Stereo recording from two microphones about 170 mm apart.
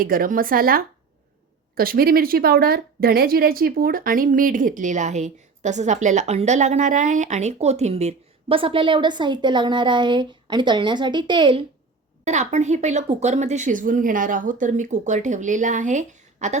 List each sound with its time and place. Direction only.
0.0 s a woman's voice: 55° right (ahead or behind); by 11.6 s 30° right (ahead or behind)
12.2 s a woman's voice: 45° right (ahead or behind)